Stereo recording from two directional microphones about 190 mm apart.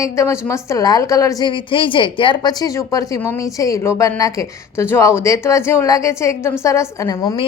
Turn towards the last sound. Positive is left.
turn(degrees=20)  # may be behind; listen again after turning